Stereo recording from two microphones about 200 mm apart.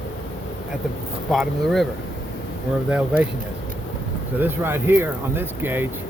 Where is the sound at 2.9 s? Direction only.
5° right (ahead or behind).